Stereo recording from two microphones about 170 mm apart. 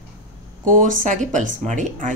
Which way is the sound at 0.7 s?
50° right (ahead or behind).